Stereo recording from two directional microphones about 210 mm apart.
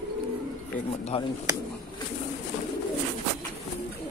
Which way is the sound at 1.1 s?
25° left (ahead or behind).